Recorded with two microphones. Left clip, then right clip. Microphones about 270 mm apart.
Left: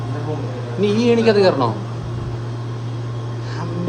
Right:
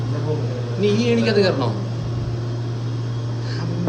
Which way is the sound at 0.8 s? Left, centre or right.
Centre.